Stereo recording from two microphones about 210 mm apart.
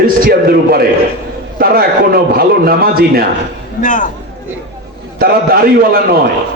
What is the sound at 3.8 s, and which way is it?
Speech, 35° left (ahead or behind).